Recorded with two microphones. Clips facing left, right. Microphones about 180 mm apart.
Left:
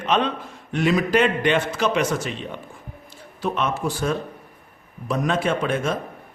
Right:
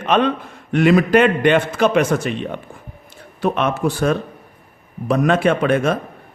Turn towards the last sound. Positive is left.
turn(degrees=-65)  # may be behind; listen again after turning